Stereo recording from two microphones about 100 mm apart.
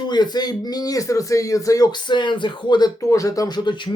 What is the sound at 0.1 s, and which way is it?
Speech, 45° left (ahead or behind).